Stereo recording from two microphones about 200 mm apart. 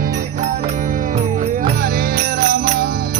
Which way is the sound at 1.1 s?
35° right (ahead or behind).